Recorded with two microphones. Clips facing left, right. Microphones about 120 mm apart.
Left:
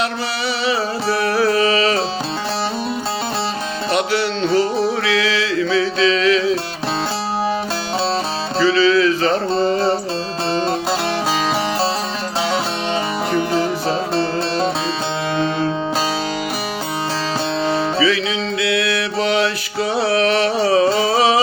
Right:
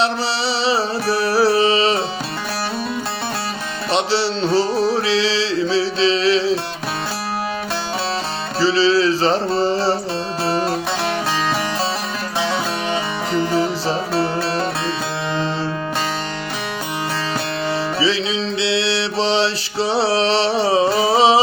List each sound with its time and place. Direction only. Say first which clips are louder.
0.6 s music: even; 30° right (ahead or behind)
3.9 s music: right 1 dB; 30° right (ahead or behind)
8.5 s music: left 1 dB; 30° right (ahead or behind)
18.0 s music: left 1 dB; 30° right (ahead or behind)